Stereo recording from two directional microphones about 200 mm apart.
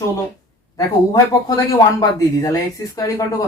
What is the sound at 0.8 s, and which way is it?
Speech, 15° left (ahead or behind).